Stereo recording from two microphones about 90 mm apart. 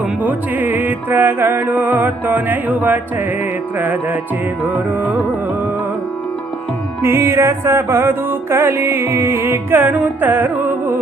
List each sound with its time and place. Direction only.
0.2 s music: 20° right (ahead or behind)
7.0 s music: 30° right (ahead or behind)